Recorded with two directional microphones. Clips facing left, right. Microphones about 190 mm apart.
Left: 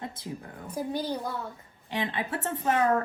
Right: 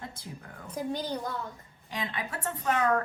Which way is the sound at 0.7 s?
10° left (ahead or behind).